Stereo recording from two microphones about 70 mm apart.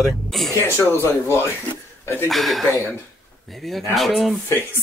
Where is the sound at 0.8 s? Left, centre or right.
Left.